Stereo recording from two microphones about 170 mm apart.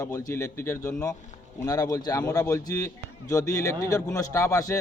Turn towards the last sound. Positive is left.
turn(degrees=20)  # may be behind; listen again after turning